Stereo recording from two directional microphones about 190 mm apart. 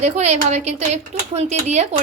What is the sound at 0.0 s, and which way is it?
Speech, 35° right (ahead or behind).